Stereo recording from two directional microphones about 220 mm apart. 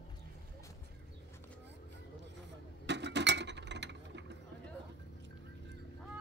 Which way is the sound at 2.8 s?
50° right (ahead or behind).